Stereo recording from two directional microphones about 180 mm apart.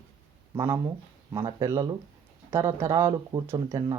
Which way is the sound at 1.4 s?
25° right (ahead or behind).